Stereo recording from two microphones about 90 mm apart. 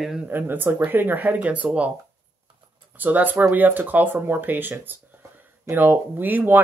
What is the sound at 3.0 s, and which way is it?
Speech, 20° right (ahead or behind).